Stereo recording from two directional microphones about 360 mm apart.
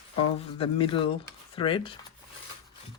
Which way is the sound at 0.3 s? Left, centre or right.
Centre.